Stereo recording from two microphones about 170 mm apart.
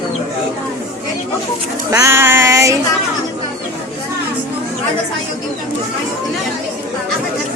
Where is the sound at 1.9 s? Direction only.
15° right (ahead or behind).